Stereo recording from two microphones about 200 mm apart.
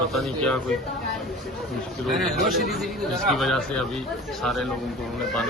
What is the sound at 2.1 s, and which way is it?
Speech, centre (ahead or behind).